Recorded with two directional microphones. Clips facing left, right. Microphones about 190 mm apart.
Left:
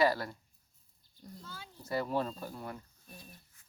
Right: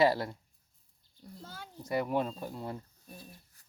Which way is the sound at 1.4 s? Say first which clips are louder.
Right 5 dB; 55° right (ahead or behind).